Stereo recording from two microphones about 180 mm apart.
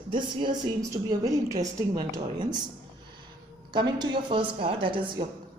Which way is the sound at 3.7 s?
25° right (ahead or behind).